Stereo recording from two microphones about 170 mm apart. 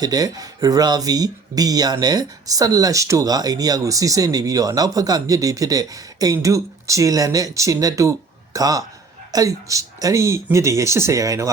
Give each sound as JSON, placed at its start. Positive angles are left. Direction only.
{"t": 0.0, "sound": "speech", "side_deg": -20}